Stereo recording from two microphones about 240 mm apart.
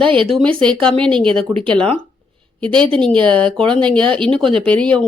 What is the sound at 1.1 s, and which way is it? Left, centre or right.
Speech, right.